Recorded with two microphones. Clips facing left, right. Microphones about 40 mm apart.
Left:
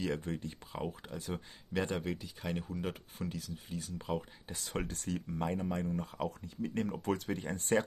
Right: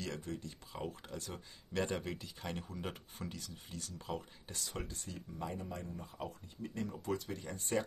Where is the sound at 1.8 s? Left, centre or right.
Centre.